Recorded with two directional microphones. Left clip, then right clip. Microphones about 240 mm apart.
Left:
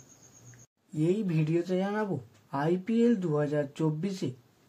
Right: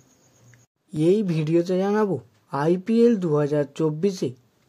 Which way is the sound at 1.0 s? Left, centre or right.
Right.